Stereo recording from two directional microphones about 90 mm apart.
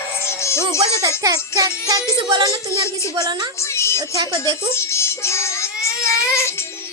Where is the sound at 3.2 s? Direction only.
50° right (ahead or behind).